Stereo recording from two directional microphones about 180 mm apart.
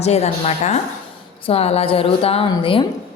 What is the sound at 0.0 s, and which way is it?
A woman's voice, 35° left (ahead or behind).